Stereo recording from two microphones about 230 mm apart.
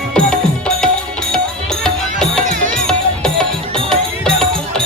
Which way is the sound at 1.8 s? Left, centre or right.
Centre.